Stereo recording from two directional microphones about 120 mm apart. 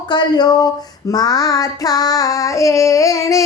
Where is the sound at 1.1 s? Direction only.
30° left (ahead or behind).